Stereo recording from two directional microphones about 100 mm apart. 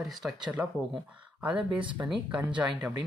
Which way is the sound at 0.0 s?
Centre (ahead or behind).